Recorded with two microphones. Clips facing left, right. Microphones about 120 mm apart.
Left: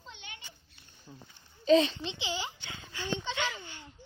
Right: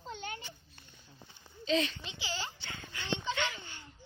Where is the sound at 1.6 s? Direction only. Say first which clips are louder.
Left 8 dB; 30° left (ahead or behind); by 3.8 s 15° left (ahead or behind).